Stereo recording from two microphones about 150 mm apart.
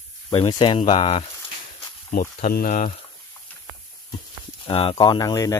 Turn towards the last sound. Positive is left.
turn(degrees=25)  # may be behind; listen again after turning